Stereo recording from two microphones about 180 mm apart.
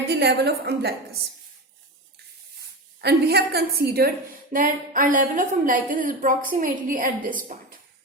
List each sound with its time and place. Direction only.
0.1 s a woman's voice: 65° right (ahead or behind)
3.0 s a woman's voice: 60° right (ahead or behind)
4.5 s a woman's voice: 50° right (ahead or behind)